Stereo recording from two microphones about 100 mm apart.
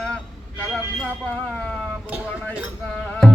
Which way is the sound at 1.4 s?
10° left (ahead or behind).